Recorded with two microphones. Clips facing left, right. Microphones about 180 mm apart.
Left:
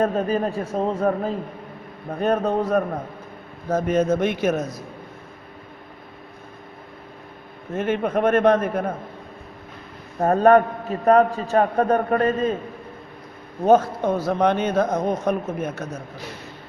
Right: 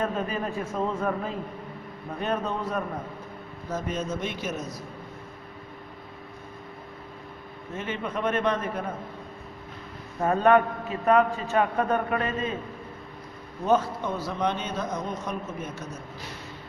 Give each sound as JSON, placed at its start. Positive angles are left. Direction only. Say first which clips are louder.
{"t": 0.0, "sound": "a man's voice", "louder": "left 7 dB", "side_deg": 40}
{"t": 7.8, "sound": "speech", "louder": "left 9 dB", "side_deg": 55}
{"t": 10.2, "sound": "a man's voice", "louder": "left 5 dB", "side_deg": 45}
{"t": 13.6, "sound": "speech", "louder": "left 7 dB", "side_deg": 45}